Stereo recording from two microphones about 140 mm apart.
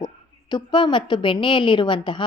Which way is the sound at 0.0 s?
35° left (ahead or behind).